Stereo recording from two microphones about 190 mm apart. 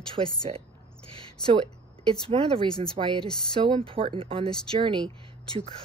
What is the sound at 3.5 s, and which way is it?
Speech, 25° right (ahead or behind).